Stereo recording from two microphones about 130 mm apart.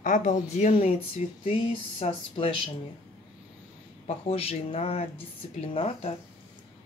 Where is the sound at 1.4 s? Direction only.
45° left (ahead or behind).